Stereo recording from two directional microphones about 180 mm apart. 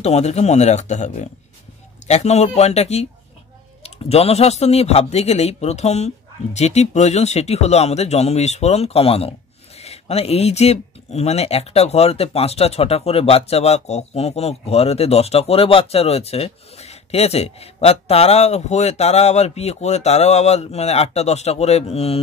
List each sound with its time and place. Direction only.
0.0 s speech: 35° left (ahead or behind)